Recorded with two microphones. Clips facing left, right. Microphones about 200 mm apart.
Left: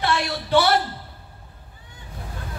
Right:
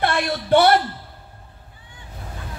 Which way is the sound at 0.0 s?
55° right (ahead or behind).